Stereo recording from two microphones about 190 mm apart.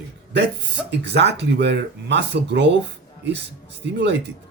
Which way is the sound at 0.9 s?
65° right (ahead or behind).